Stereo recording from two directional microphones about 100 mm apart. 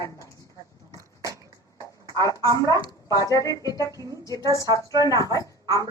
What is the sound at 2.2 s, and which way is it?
A man's voice, 35° left (ahead or behind).